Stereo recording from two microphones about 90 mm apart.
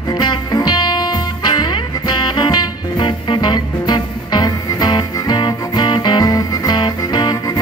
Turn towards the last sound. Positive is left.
turn(degrees=55)  # may be behind; listen again after turning